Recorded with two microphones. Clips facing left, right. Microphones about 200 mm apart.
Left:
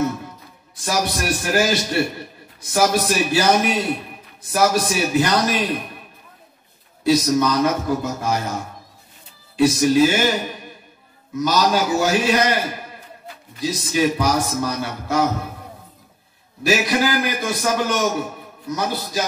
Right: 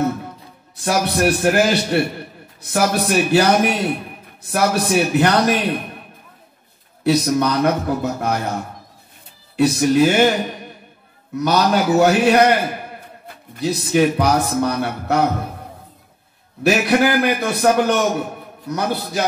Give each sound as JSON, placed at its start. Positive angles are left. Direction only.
{"t": 0.8, "sound": "a man's voice", "side_deg": -60}
{"t": 7.0, "sound": "a man's voice", "side_deg": -60}
{"t": 9.8, "sound": "a man's voice", "side_deg": -60}
{"t": 16.6, "sound": "a man's voice", "side_deg": -60}